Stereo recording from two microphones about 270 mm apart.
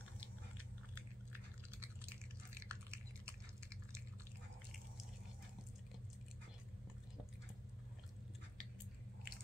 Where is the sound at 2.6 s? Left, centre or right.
Centre.